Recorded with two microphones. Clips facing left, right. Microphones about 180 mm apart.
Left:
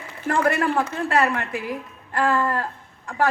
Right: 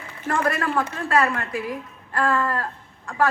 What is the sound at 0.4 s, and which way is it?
A man's voice, 25° left (ahead or behind).